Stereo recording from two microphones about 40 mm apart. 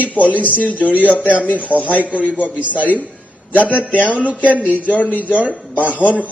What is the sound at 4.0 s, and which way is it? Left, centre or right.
Speech, right.